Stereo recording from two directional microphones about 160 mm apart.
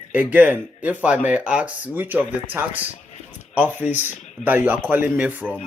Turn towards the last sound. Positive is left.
turn(degrees=-10)  # may be behind; listen again after turning